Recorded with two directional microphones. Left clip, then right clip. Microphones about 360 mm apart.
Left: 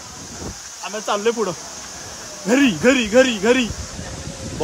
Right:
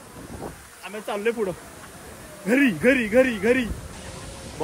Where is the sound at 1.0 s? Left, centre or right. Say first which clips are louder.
Left 5 dB; left.